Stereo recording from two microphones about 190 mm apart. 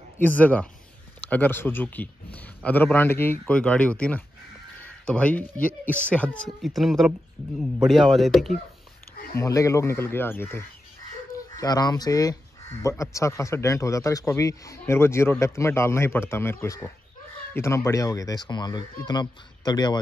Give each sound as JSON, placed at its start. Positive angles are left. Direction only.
{"t": 0.2, "sound": "speech", "side_deg": 10}
{"t": 9.4, "sound": "speech", "side_deg": 15}